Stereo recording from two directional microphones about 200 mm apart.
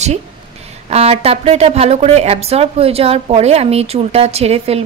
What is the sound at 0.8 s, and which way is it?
A woman's voice, 30° right (ahead or behind).